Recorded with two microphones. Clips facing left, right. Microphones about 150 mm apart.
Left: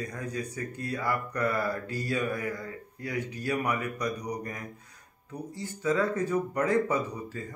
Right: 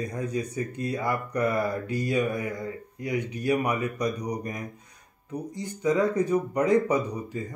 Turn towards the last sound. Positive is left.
turn(degrees=-20)  # may be behind; listen again after turning